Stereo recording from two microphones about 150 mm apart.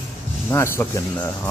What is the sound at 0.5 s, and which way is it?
Speech, 20° left (ahead or behind).